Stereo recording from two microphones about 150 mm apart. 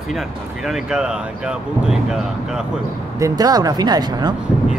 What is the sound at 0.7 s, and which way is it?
Speech, 5° right (ahead or behind).